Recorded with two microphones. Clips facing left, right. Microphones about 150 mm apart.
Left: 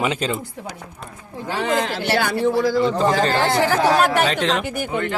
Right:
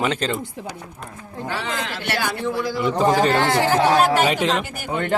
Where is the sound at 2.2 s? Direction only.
55° left (ahead or behind).